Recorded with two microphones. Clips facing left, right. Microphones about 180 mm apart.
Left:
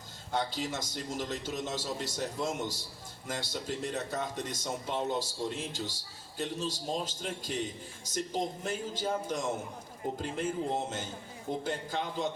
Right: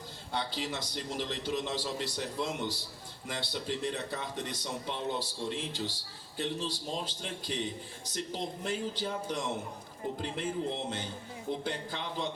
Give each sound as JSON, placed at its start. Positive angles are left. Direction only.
{"t": 0.3, "sound": "a man's voice", "side_deg": 45}